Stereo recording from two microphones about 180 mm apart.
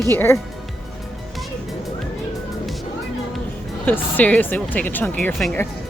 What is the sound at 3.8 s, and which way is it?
Speech, 10° left (ahead or behind).